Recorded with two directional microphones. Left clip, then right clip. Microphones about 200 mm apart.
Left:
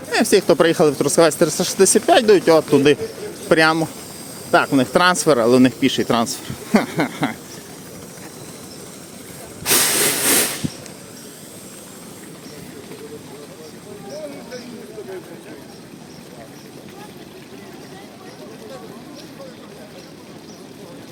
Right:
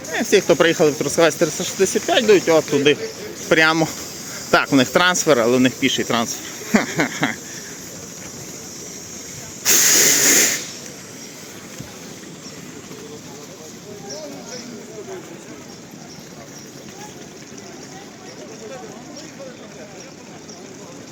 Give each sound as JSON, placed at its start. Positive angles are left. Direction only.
{"t": 0.1, "sound": "speech", "side_deg": 25}
{"t": 4.5, "sound": "speech", "side_deg": 0}
{"t": 4.9, "sound": "speech", "side_deg": 20}
{"t": 6.7, "sound": "a sound", "side_deg": 10}
{"t": 9.6, "sound": "wheeze", "side_deg": -55}